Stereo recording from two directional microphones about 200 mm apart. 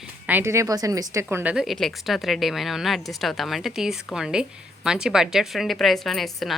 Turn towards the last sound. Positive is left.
turn(degrees=0)  # may be behind; listen again after turning